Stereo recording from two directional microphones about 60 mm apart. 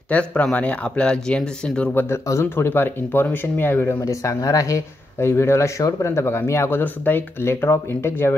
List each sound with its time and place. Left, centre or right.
0.1 s speech: left
2.5 s speech: left
4.0 s speech: left
5.2 s speech: left
6.8 s speech: left